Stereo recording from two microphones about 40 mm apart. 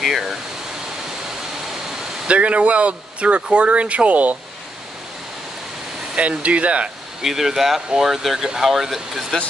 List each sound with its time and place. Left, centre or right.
0.0 s speech: centre
2.2 s speech: right
6.1 s speech: right
7.2 s speech: centre